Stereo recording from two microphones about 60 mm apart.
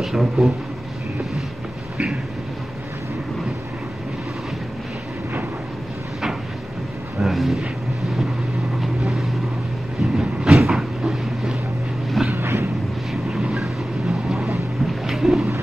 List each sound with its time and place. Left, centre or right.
0.0 s speech: centre
7.2 s a sound: centre
8.8 s vehicle: centre
10.1 s train: centre
12.3 s vehicle: right
13.1 s vehicle: centre
15.0 s a sound: centre